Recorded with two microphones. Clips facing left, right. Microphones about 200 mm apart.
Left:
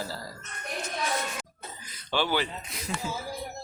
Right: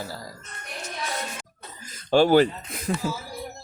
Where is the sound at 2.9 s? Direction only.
55° right (ahead or behind).